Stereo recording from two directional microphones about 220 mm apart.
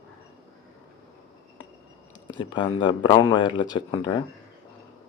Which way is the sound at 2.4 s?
20° left (ahead or behind).